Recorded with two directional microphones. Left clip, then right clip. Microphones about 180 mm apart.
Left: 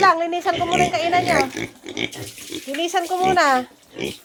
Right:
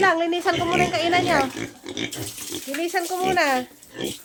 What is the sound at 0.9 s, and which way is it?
Speech, 20° right (ahead or behind).